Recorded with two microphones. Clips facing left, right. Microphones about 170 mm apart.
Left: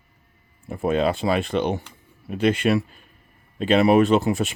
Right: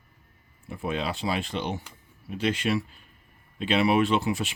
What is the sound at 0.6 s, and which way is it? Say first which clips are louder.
Speech: left 9 dB; 45° left (ahead or behind).